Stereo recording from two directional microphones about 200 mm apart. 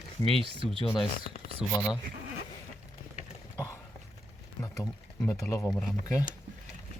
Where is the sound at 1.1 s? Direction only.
50° left (ahead or behind).